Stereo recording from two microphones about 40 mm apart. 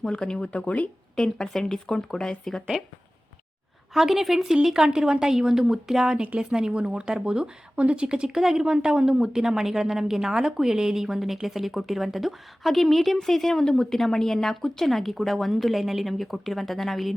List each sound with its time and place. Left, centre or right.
0.1 s speech: centre
0.5 s speech: left
1.1 s speech: centre
3.9 s a woman's voice: centre
4.6 s speech: centre
7.8 s speech: right
8.4 s speech: centre
8.6 s a woman's voice: centre